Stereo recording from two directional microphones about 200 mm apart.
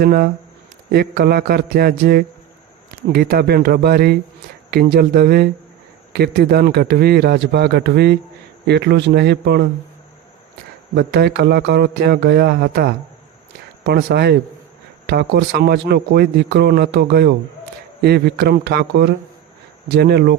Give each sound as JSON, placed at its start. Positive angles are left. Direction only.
{"t": 0.0, "sound": "a man's voice", "side_deg": -50}
{"t": 10.9, "sound": "a man's voice", "side_deg": -55}